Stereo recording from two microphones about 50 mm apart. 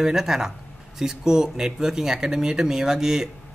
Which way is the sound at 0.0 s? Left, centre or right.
Centre.